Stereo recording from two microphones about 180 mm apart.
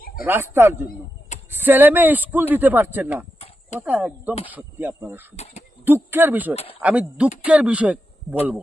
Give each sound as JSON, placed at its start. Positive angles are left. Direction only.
{"t": 0.3, "sound": "a man's voice", "side_deg": -10}